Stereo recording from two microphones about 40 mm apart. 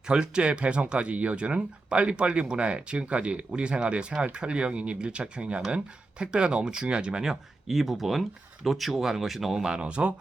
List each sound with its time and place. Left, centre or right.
0.1 s speech: right
7.3 s speech: centre
9.6 s speech: right